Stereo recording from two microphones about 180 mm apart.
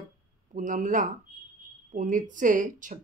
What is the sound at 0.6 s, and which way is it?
Speech, 45° right (ahead or behind).